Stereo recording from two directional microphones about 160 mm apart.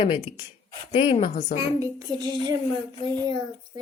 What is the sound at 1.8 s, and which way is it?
Child singing, 20° right (ahead or behind).